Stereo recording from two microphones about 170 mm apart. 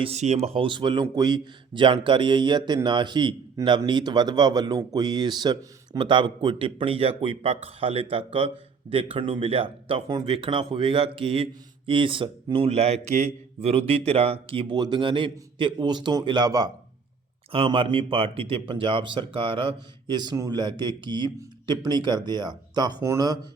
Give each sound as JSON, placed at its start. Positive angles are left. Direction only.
{"t": 0.0, "sound": "a man's voice", "side_deg": -40}